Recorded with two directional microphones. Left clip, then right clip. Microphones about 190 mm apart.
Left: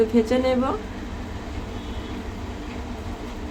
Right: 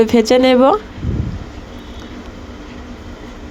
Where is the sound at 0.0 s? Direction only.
50° right (ahead or behind).